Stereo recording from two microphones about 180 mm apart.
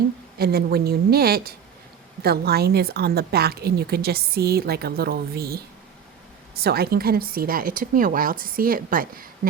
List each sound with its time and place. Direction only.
0.3 s a woman's voice: 60° right (ahead or behind)